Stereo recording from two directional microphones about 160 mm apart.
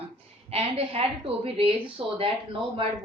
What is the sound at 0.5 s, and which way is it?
A woman's voice, 35° right (ahead or behind).